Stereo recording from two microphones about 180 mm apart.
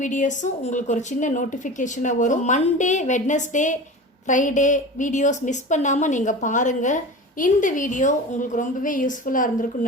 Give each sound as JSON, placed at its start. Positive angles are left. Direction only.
{"t": 0.0, "sound": "a woman's voice", "side_deg": 45}